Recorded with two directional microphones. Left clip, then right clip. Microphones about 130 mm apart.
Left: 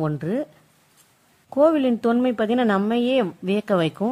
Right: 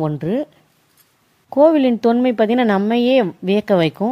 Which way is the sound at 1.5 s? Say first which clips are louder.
Right 5 dB; 20° right (ahead or behind).